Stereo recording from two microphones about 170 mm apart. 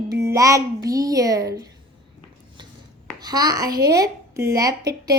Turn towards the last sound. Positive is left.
turn(degrees=-20)  # may be behind; listen again after turning